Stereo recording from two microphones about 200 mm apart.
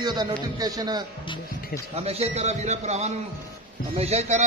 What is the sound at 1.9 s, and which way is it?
A man's voice, 30° right (ahead or behind).